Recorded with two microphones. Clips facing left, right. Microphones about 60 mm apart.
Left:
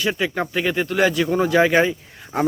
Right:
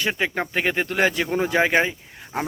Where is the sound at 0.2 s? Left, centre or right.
Right.